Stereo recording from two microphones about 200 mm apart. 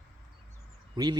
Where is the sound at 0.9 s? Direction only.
20° right (ahead or behind).